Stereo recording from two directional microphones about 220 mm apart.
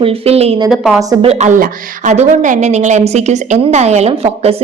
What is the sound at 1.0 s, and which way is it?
Speech, 15° right (ahead or behind).